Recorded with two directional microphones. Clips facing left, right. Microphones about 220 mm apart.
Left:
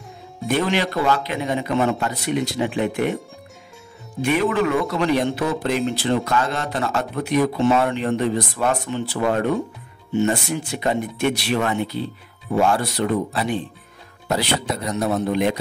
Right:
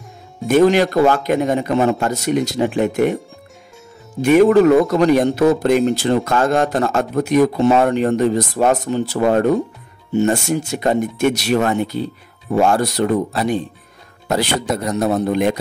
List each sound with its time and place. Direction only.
0.5 s speech: 45° right (ahead or behind)
4.2 s speech: 40° right (ahead or behind)